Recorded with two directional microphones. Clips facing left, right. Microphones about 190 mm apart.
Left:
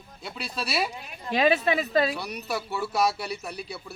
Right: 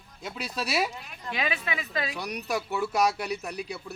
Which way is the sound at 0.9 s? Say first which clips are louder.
Left 2 dB; 20° left (ahead or behind).